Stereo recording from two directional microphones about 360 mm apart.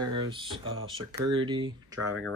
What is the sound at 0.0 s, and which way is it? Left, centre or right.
Speech, centre.